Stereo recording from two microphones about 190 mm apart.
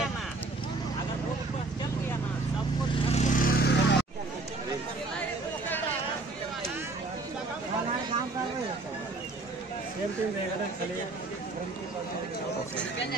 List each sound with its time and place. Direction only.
3.1 s vehicle: 40° left (ahead or behind); by 4.0 s 55° left (ahead or behind)